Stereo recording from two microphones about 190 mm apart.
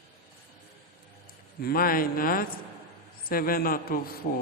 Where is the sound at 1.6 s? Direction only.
50° left (ahead or behind).